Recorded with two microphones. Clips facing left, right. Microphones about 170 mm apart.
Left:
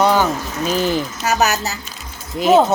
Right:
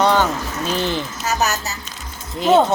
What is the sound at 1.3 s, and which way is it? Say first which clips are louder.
Speech: left 4 dB; 70° left (ahead or behind).